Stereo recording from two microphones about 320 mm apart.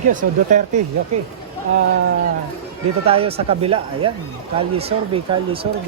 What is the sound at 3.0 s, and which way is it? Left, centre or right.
Speech, centre.